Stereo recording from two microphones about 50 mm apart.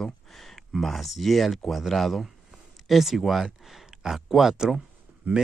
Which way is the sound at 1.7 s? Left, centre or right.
Centre.